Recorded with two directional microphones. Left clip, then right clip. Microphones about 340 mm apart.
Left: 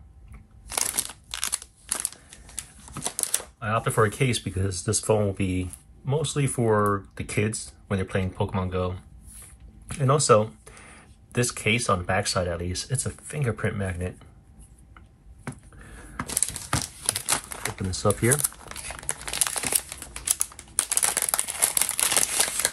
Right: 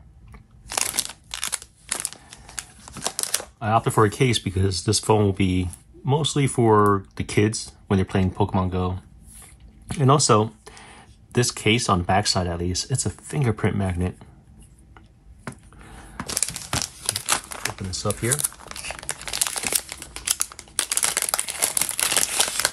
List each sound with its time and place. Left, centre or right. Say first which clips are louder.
0.7 s crunch: right 4 dB; centre
6.8 s speech: right 5 dB; centre
9.9 s speech: right 2 dB; centre
15.4 s crumpling: right 2 dB; centre